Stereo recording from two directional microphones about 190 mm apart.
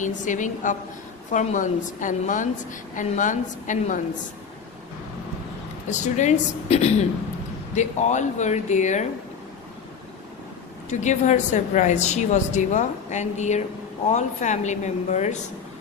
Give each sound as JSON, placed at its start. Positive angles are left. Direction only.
{"t": 0.3, "sound": "a woman's voice", "side_deg": 40}
{"t": 5.9, "sound": "a woman's voice", "side_deg": 40}
{"t": 10.8, "sound": "a woman's voice", "side_deg": 40}